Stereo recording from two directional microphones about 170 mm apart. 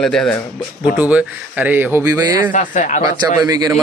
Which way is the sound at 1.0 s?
10° right (ahead or behind).